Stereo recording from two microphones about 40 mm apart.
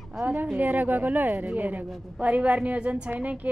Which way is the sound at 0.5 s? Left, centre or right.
Right.